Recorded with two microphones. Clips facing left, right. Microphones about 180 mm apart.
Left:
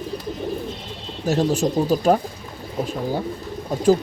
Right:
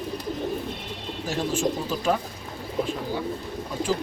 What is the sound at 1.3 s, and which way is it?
Speech, 40° left (ahead or behind).